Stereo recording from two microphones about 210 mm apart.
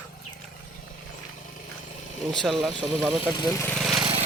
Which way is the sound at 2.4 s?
Centre (ahead or behind).